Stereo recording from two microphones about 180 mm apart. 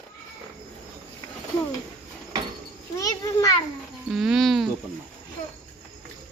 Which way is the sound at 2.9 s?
20° left (ahead or behind).